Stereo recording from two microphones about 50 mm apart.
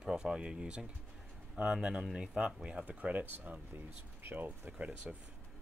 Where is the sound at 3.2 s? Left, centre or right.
Right.